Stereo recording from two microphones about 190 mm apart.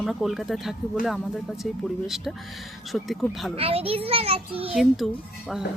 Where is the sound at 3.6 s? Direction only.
30° right (ahead or behind).